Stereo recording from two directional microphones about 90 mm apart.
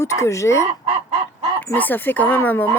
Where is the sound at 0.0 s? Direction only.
35° left (ahead or behind).